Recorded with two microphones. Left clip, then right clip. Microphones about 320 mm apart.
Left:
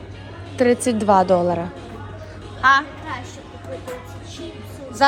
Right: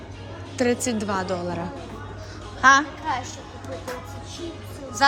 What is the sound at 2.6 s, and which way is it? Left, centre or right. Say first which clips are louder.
Speech: left 1 dB; centre.